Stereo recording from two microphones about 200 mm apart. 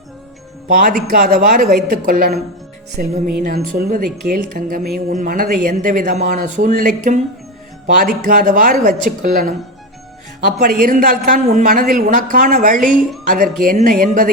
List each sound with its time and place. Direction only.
0.8 s speech: 45° right (ahead or behind)
10.6 s speech: 45° right (ahead or behind)